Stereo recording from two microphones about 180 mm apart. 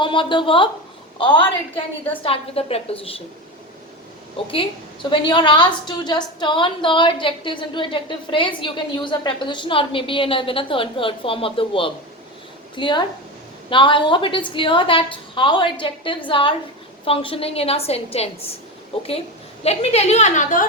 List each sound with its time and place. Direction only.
0.0 s a woman's voice: 25° left (ahead or behind)
4.4 s a woman's voice: 30° left (ahead or behind); by 20.7 s 45° left (ahead or behind)